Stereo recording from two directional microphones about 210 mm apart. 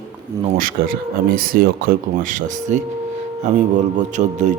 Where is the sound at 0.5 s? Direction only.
45° right (ahead or behind).